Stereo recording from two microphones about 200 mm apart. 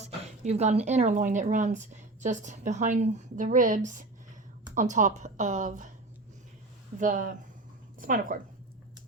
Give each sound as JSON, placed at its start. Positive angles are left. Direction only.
{"t": 0.0, "sound": "speech", "side_deg": -35}
{"t": 7.0, "sound": "speech", "side_deg": -40}